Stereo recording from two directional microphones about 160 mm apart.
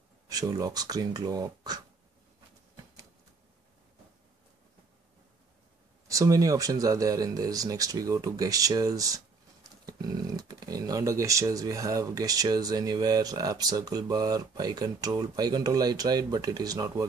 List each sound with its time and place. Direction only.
0.3 s speech: 25° right (ahead or behind)
6.0 s speech: 20° right (ahead or behind)